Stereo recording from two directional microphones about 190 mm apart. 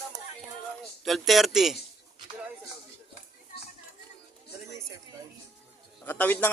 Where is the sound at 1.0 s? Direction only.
Centre (ahead or behind).